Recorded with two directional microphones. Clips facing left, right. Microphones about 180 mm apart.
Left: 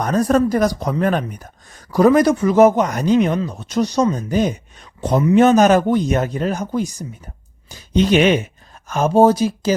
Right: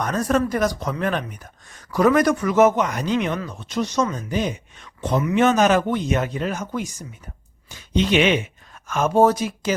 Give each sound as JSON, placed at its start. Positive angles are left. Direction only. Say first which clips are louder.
{"t": 0.0, "sound": "speech", "louder": "left 5 dB", "side_deg": 35}